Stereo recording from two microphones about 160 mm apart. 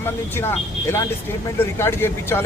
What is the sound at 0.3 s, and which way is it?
Speech, 15° left (ahead or behind).